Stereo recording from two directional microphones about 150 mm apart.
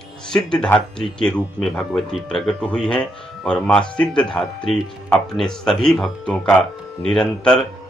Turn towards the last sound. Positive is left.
turn(degrees=5)  # may be behind; listen again after turning